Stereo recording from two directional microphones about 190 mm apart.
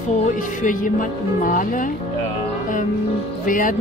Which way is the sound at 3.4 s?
45° left (ahead or behind).